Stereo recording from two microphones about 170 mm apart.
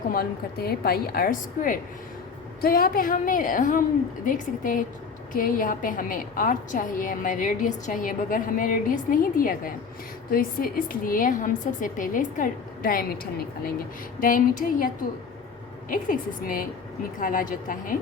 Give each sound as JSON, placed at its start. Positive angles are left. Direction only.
{"t": 0.1, "sound": "a woman's voice", "side_deg": 65}
{"t": 15.9, "sound": "a woman's voice", "side_deg": 55}